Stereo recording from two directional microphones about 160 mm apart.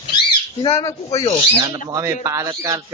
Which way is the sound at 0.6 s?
35° left (ahead or behind).